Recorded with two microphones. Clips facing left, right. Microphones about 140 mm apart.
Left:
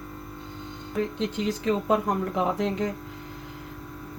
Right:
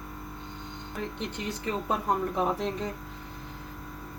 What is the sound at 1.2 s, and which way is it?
Speech, 90° left.